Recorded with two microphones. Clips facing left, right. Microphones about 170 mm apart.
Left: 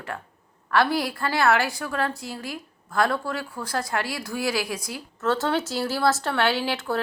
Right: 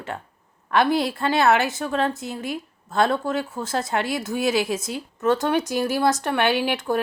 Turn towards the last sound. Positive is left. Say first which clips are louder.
# right 3 dB
turn(degrees=-15)  # may be behind; listen again after turning